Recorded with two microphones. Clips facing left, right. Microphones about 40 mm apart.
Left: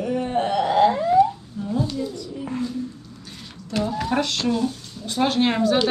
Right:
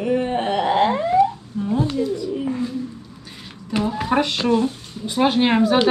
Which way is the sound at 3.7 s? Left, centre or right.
Centre.